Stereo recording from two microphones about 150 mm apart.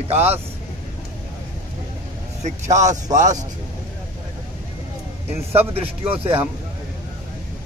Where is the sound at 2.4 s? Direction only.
50° right (ahead or behind).